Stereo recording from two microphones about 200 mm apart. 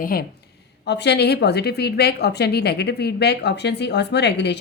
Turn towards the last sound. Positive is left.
turn(degrees=60)  # may be behind; listen again after turning